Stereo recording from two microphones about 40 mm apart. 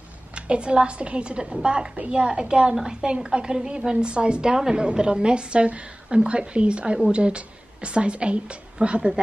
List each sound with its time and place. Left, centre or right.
0.3 s a woman's voice: right